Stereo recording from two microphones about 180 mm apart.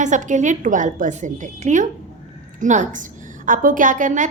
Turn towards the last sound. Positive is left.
turn(degrees=-45)  # may be behind; listen again after turning